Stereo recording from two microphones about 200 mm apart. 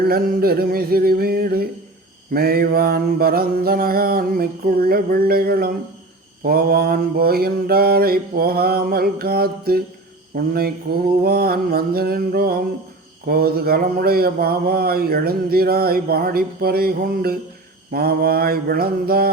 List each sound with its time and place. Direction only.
0.0 s speech: 50° right (ahead or behind)